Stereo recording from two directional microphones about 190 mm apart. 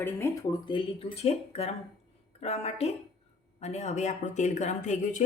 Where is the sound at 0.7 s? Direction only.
25° left (ahead or behind).